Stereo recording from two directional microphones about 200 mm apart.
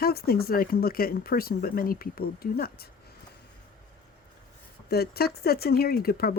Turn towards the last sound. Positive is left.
turn(degrees=50)  # may be behind; listen again after turning